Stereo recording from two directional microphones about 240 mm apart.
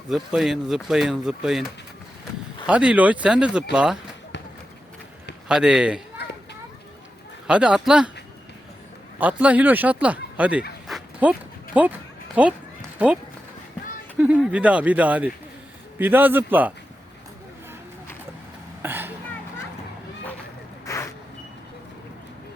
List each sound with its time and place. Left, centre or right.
0.1 s speech: centre
2.6 s speech: centre
5.5 s speech: centre
6.1 s children playing: left
7.4 s speech: centre
9.1 s speech: centre
10.8 s a sound: centre
12.4 s a man's voice: centre
14.2 s a man's voice: centre
18.8 s a sound: centre
20.8 s vehicle: centre